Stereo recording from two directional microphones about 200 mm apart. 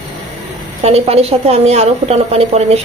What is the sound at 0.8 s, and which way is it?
Speech, 30° right (ahead or behind).